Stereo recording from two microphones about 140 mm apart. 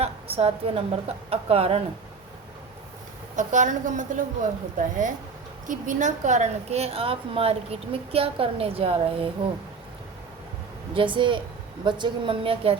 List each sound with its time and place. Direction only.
0.0 s a woman's voice: 45° right (ahead or behind)
3.3 s a woman's voice: 60° right (ahead or behind); by 9.5 s 40° right (ahead or behind)
10.9 s a woman's voice: 35° right (ahead or behind)